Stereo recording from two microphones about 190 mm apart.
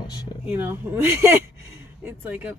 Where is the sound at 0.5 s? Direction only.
10° right (ahead or behind).